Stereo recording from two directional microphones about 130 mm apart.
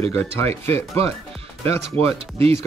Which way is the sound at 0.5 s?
50° right (ahead or behind).